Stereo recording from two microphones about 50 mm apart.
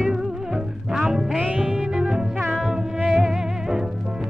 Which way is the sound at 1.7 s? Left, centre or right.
Centre.